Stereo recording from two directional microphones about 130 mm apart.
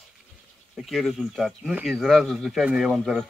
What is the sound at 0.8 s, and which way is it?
Speech, centre (ahead or behind).